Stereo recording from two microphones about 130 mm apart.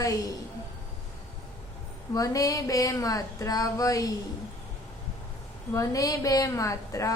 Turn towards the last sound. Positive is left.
turn(degrees=25)  # may be behind; listen again after turning